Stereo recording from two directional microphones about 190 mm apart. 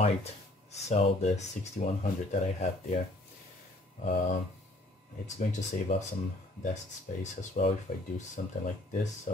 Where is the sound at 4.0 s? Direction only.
40° left (ahead or behind).